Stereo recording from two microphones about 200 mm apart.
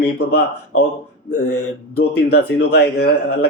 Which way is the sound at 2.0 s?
75° left (ahead or behind).